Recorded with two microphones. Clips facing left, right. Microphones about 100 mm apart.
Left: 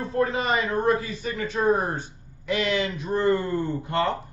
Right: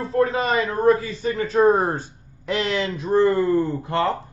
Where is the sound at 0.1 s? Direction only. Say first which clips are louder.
Right 4 dB; 25° left (ahead or behind).